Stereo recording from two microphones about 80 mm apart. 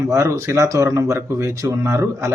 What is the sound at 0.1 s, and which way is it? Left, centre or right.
Speech, right.